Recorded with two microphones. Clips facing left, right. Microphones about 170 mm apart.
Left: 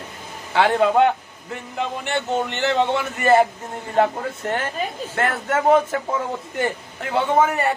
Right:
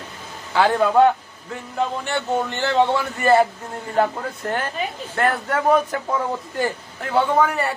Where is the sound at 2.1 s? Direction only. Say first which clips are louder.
Even; 20° left (ahead or behind).